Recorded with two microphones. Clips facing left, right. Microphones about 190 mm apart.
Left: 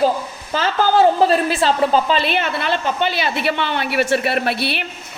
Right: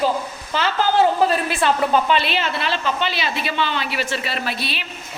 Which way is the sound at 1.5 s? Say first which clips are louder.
Left 2 dB; 30° left (ahead or behind).